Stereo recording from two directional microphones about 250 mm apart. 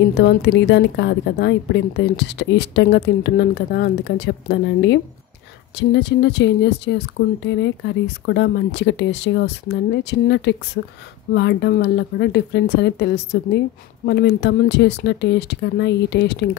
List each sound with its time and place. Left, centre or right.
0.2 s speech: left